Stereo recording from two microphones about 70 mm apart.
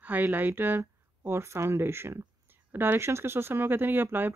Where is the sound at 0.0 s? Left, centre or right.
Right.